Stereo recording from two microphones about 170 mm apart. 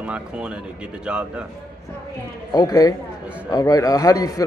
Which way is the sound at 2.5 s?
20° left (ahead or behind).